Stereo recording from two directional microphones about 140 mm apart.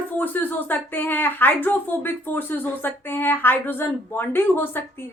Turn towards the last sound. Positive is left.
turn(degrees=15)  # may be behind; listen again after turning